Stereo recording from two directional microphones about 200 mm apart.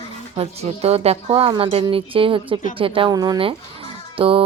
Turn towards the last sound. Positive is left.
turn(degrees=-25)  # may be behind; listen again after turning